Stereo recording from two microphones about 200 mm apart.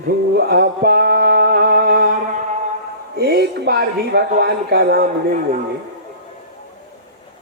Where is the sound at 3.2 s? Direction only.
55° right (ahead or behind).